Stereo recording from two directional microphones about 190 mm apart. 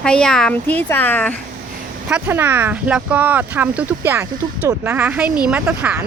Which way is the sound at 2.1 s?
10° right (ahead or behind).